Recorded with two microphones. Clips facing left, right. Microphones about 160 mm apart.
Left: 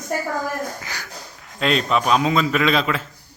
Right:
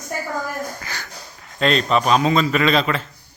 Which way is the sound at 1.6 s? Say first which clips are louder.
Right 2 dB; 5° left (ahead or behind).